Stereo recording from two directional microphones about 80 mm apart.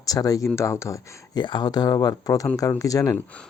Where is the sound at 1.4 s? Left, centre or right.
Left.